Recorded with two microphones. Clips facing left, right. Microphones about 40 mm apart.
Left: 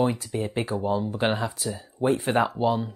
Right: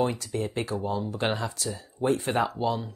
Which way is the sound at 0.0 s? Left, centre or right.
Centre.